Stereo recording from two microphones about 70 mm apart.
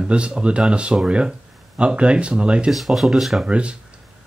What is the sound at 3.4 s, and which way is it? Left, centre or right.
Speech, centre.